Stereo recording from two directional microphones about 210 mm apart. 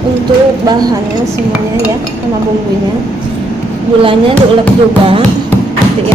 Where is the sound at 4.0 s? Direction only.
25° right (ahead or behind).